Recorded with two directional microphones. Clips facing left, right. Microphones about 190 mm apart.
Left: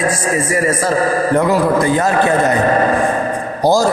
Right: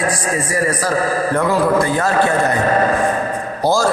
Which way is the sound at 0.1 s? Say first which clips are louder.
Left 3 dB; 25° left (ahead or behind).